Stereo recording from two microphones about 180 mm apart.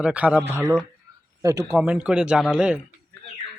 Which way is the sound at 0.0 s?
5° right (ahead or behind).